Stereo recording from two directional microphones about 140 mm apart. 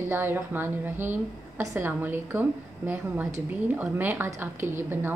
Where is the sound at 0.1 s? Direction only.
15° right (ahead or behind).